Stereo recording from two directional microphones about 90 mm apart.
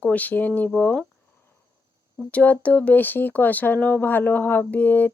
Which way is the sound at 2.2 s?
15° left (ahead or behind).